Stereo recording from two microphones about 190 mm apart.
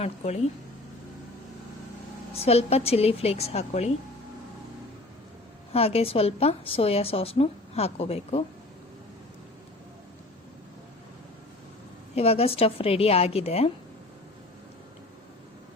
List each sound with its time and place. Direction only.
0.0 s a woman's voice: 35° left (ahead or behind)
2.3 s a woman's voice: 30° left (ahead or behind)
5.7 s a woman's voice: 30° left (ahead or behind)
12.1 s a woman's voice: 30° left (ahead or behind)